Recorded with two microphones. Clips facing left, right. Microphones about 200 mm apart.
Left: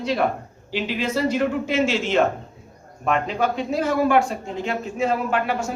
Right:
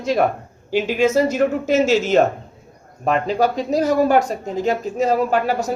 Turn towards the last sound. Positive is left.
turn(degrees=-40)  # may be behind; listen again after turning